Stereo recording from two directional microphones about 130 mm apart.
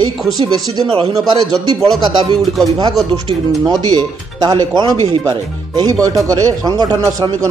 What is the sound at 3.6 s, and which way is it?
A man's voice, 30° right (ahead or behind).